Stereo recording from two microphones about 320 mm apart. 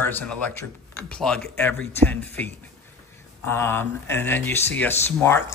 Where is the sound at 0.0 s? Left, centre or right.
Centre.